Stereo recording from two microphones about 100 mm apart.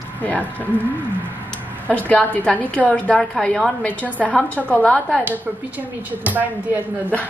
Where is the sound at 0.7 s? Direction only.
20° right (ahead or behind).